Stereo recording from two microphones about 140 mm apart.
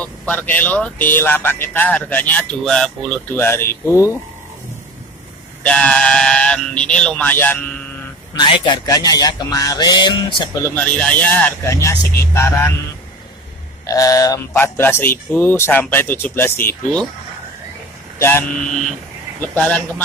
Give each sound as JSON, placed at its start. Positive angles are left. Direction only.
{"t": 0.3, "sound": "speech", "side_deg": 10}
{"t": 3.3, "sound": "speech", "side_deg": 15}
{"t": 5.6, "sound": "speech", "side_deg": 5}
{"t": 8.4, "sound": "speech", "side_deg": 35}
{"t": 10.6, "sound": "speech", "side_deg": 10}
{"t": 11.7, "sound": "speech", "side_deg": 20}
{"t": 13.8, "sound": "speech", "side_deg": 25}
{"t": 19.4, "sound": "speech", "side_deg": 10}